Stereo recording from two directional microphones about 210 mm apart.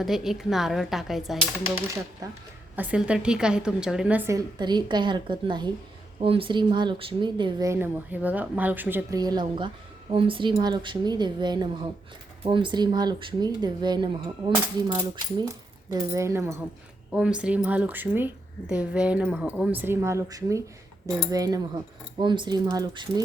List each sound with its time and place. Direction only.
0.0 s a woman's voice: centre (ahead or behind)
2.7 s a woman's voice: 5° right (ahead or behind)
4.3 s speech: 15° right (ahead or behind)